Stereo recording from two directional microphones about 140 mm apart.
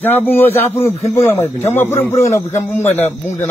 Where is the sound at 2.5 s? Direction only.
55° left (ahead or behind).